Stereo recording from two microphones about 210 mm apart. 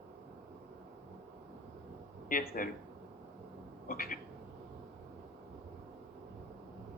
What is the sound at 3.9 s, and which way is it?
Speech, 45° left (ahead or behind).